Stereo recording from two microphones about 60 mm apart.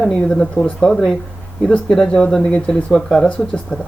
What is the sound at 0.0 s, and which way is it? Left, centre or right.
Speech, centre.